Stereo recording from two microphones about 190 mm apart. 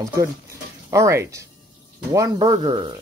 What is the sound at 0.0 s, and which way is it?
Speech, 20° right (ahead or behind).